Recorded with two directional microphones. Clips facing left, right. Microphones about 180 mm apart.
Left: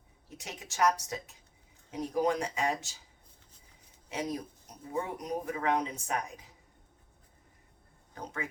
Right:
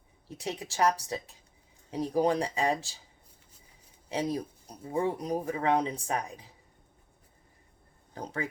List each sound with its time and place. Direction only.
0.3 s speech: 35° right (ahead or behind)
4.1 s speech: 30° right (ahead or behind)
8.1 s speech: 35° right (ahead or behind)